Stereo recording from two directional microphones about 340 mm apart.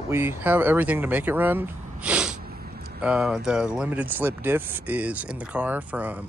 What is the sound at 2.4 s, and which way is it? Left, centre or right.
Sneeze, right.